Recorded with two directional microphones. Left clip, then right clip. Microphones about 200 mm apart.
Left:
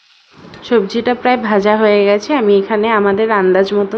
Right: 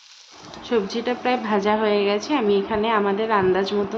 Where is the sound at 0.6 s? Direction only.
35° left (ahead or behind).